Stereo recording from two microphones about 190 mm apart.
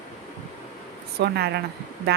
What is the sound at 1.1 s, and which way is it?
Speech, 60° right (ahead or behind).